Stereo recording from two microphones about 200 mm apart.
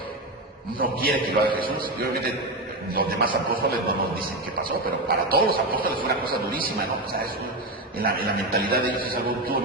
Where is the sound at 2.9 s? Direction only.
45° right (ahead or behind).